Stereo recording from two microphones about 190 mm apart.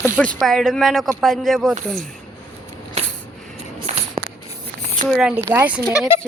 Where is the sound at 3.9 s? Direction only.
35° right (ahead or behind).